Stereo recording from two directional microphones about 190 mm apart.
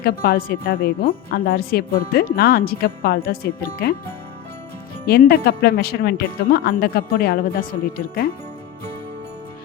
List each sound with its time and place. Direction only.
0.0 s speech: 50° left (ahead or behind)